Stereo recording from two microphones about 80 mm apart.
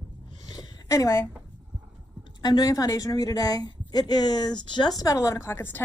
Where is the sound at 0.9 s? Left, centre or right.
Left.